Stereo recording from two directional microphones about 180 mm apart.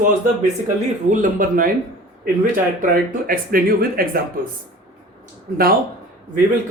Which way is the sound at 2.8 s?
50° right (ahead or behind).